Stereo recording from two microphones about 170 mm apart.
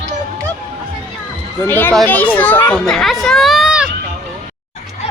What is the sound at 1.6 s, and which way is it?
A child's voice, 10° left (ahead or behind).